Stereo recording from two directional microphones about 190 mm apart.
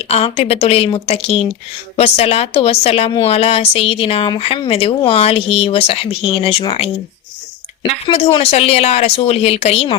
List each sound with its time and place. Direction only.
0.1 s a woman's voice: 30° left (ahead or behind)